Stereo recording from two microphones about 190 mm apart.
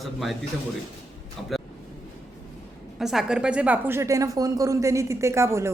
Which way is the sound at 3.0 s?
5° right (ahead or behind).